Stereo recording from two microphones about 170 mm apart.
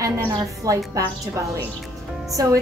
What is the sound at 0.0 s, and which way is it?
Speech, 20° right (ahead or behind).